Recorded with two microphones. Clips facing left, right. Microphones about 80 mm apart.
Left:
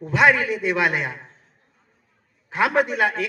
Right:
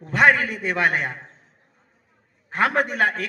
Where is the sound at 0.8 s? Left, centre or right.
Right.